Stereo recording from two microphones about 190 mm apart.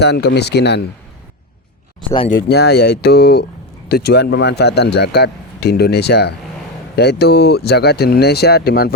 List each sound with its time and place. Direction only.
0.0 s speech: 60° left (ahead or behind)
2.3 s speech: 60° left (ahead or behind)